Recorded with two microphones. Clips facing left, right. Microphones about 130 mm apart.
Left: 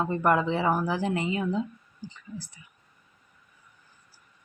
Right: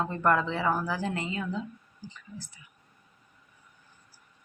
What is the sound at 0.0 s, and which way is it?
A woman's voice, 15° left (ahead or behind).